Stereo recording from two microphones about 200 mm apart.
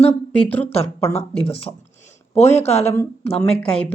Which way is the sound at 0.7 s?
30° left (ahead or behind).